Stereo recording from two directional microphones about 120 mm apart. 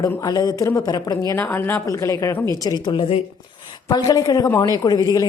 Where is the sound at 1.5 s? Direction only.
15° left (ahead or behind).